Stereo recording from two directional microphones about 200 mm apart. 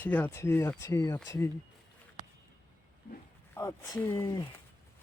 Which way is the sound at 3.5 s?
15° left (ahead or behind).